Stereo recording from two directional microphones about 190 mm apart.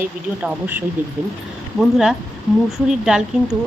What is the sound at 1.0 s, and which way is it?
A woman's voice, 10° right (ahead or behind).